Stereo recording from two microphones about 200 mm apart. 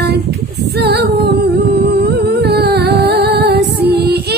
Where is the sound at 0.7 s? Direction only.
55° right (ahead or behind).